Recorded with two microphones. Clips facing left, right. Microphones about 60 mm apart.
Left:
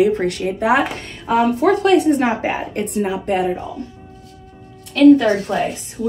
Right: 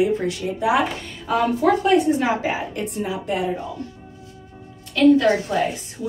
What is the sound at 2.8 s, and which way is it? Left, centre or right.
Speech, left.